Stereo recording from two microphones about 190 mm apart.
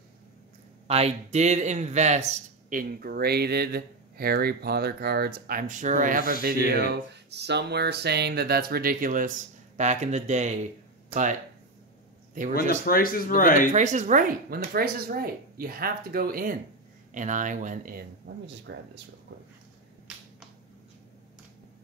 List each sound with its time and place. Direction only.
0.8 s a man's voice: 35° right (ahead or behind)
6.7 s a sound: 55° right (ahead or behind)
9.8 s speech: 40° right (ahead or behind)
12.8 s speech: 50° left (ahead or behind)
13.7 s a man's voice: 40° right (ahead or behind)
18.7 s speech: 70° right (ahead or behind)